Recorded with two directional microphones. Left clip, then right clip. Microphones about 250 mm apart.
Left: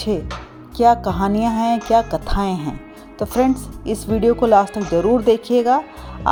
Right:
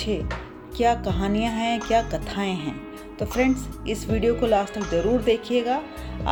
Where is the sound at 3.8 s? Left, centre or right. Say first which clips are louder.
Left 7 dB; left.